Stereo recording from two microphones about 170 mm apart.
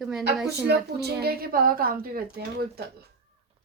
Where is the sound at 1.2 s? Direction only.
60° right (ahead or behind).